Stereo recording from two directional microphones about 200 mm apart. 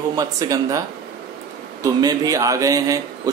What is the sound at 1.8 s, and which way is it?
Speech, 15° right (ahead or behind).